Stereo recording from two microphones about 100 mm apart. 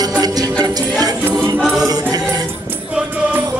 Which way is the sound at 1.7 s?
40° right (ahead or behind).